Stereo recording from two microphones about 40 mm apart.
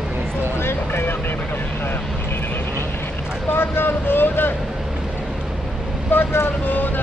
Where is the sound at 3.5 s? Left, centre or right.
Left.